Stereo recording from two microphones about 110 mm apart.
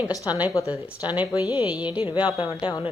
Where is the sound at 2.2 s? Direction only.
40° left (ahead or behind).